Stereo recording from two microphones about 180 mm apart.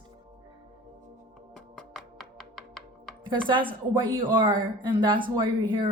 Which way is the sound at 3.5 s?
25° right (ahead or behind).